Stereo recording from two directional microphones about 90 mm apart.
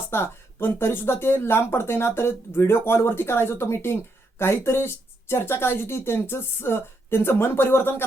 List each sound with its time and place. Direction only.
0.1 s speech: 25° left (ahead or behind)